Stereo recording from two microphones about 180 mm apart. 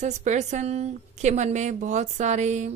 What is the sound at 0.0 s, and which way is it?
A woman's voice, 40° right (ahead or behind).